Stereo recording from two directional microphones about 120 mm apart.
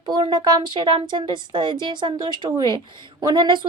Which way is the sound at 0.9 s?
40° right (ahead or behind).